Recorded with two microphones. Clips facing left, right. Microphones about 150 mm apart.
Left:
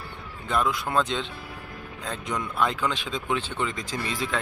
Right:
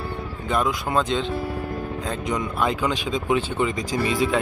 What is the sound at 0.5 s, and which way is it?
Speech, 5° right (ahead or behind).